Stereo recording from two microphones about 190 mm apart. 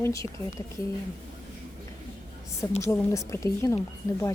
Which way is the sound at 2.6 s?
15° left (ahead or behind).